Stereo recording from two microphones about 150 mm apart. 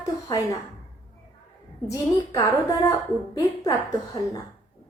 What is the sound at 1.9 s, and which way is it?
A woman's voice, 20° left (ahead or behind).